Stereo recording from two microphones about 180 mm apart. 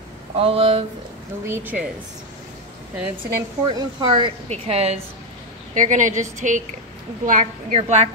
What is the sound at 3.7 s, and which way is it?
Speech, 25° right (ahead or behind).